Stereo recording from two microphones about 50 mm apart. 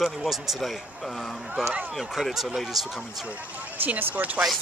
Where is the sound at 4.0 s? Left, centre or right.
Right.